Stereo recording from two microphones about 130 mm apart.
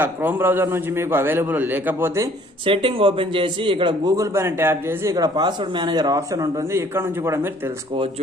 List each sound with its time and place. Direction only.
0.0 s a man's voice: 15° right (ahead or behind)
2.6 s a man's voice: 45° right (ahead or behind)
4.2 s a man's voice: 20° right (ahead or behind)
5.1 s a man's voice: 30° right (ahead or behind)